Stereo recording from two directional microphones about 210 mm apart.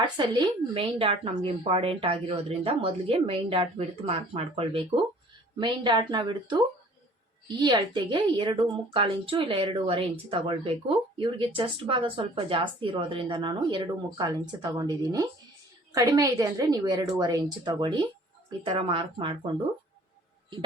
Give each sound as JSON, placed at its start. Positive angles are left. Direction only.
{"t": 0.2, "sound": "a woman's voice", "side_deg": -25}